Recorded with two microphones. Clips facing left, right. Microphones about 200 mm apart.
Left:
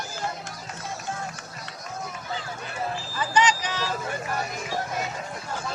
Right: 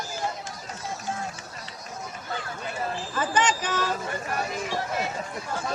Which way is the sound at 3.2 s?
50° right (ahead or behind).